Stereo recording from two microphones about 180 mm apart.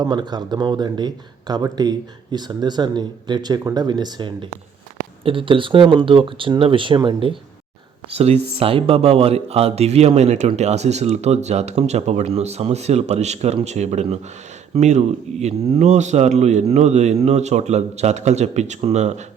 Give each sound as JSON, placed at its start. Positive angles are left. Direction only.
{"t": 0.0, "sound": "speech", "side_deg": -25}